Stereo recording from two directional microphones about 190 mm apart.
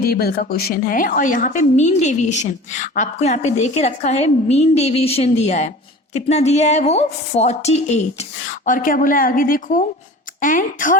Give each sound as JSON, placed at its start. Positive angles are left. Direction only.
{"t": 0.0, "sound": "a woman's voice", "side_deg": 55}